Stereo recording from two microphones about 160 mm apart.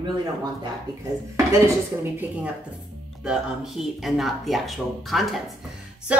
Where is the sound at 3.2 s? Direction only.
5° right (ahead or behind).